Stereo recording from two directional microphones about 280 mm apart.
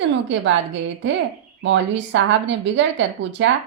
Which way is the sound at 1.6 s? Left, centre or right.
Right.